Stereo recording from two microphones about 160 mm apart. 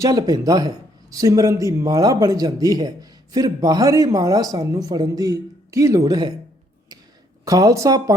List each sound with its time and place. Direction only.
0.0 s a man's voice: 25° right (ahead or behind)
7.4 s a man's voice: 20° right (ahead or behind)